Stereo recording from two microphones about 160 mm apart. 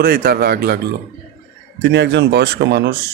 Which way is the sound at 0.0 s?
75° right (ahead or behind).